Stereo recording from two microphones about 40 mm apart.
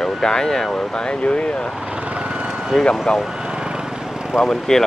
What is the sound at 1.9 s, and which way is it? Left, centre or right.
Vehicle, right.